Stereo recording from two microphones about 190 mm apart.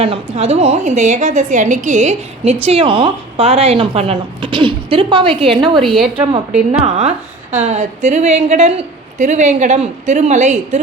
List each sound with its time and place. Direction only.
0.0 s a woman's voice: 30° right (ahead or behind)
5.8 s speech: centre (ahead or behind)
6.7 s a woman's voice: 35° right (ahead or behind)